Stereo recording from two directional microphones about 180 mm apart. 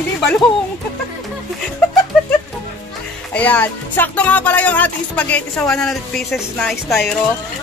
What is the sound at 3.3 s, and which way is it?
Music, 10° left (ahead or behind).